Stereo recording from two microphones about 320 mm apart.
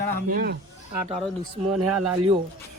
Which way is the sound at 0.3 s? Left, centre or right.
Right.